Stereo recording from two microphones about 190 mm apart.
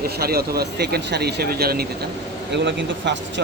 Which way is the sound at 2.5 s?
70° right (ahead or behind).